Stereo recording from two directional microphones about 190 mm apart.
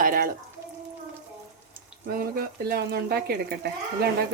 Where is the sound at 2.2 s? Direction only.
50° right (ahead or behind).